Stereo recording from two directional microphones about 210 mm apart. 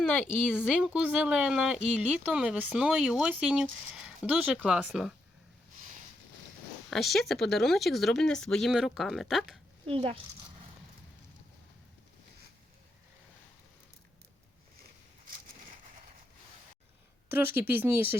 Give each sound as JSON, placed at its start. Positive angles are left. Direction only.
{"t": 0.0, "sound": "speech", "side_deg": 0}
{"t": 6.9, "sound": "speech", "side_deg": 0}
{"t": 9.8, "sound": "speech", "side_deg": -25}
{"t": 17.3, "sound": "speech", "side_deg": -10}